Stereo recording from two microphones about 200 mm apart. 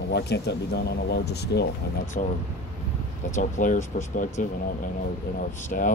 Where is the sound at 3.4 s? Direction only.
40° left (ahead or behind).